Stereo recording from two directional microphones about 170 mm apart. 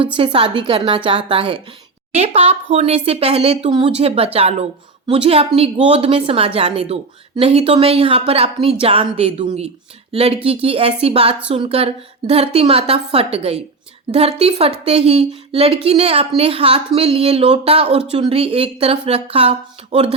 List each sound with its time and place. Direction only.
0.0 s a woman's voice: 30° right (ahead or behind)